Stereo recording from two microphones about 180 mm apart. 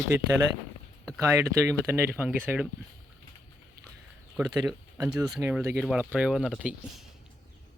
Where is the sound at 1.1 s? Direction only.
15° right (ahead or behind).